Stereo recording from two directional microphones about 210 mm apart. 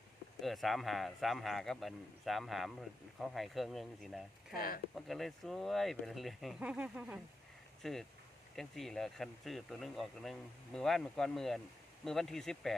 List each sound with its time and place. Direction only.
0.4 s speech: centre (ahead or behind)
4.5 s speech: 45° left (ahead or behind)
5.0 s speech: centre (ahead or behind)